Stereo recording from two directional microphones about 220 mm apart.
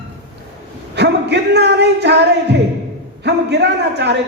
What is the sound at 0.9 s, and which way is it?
Speech, 50° right (ahead or behind).